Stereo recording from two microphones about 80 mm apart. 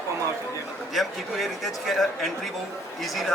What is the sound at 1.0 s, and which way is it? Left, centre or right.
Speech, centre.